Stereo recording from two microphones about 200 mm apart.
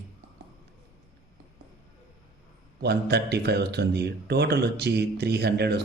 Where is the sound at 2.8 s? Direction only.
55° right (ahead or behind).